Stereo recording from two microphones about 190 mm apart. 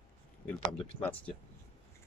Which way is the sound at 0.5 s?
30° left (ahead or behind).